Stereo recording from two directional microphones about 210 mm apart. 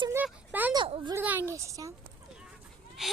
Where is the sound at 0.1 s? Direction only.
10° right (ahead or behind).